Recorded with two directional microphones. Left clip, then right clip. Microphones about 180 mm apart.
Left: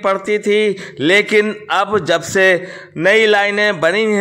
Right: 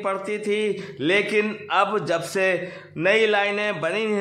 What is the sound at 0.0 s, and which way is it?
A man's voice, 35° left (ahead or behind).